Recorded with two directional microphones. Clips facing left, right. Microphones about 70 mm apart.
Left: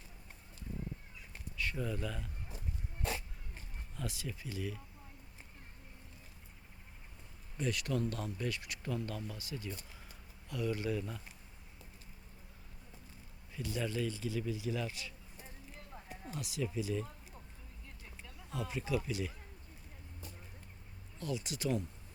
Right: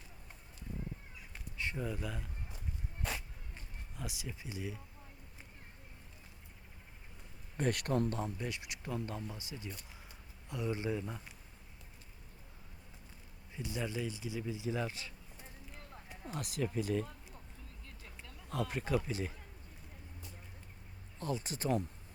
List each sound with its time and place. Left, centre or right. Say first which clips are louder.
1.7 s speech: left 1 dB; centre
3.9 s speech: left 2 dB; centre
7.5 s speech: right 3 dB; right
8.1 s speech: even; centre
13.6 s speech: left 2 dB; centre
16.3 s speech: right 2 dB; right
18.7 s speech: left 1 dB; right
21.2 s speech: right 1 dB; right